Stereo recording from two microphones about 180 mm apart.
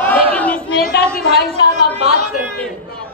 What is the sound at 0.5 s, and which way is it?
Chatter, 55° left (ahead or behind).